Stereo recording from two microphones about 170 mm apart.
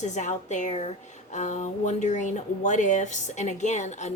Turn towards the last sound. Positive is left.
turn(degrees=45)  # may be behind; listen again after turning